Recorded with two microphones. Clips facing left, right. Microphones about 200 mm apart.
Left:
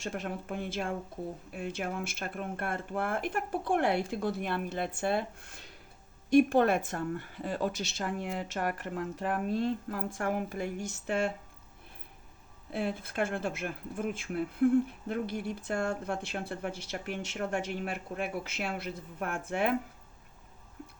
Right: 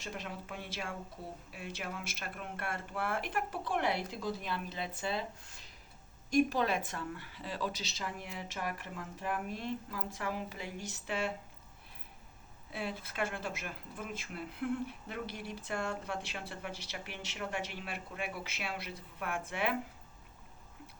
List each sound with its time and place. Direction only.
0.0 s speech: 55° left (ahead or behind)
12.7 s speech: 50° left (ahead or behind)